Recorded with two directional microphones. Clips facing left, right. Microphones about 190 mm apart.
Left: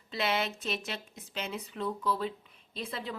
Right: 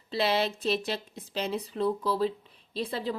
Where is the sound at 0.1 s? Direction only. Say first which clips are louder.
Right 5 dB; 35° right (ahead or behind).